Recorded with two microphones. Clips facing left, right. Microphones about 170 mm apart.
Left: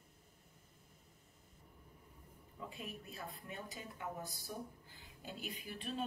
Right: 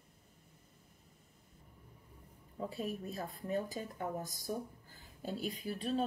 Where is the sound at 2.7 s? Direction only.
35° right (ahead or behind).